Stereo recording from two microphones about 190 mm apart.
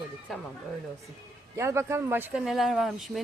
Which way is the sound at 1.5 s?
15° right (ahead or behind).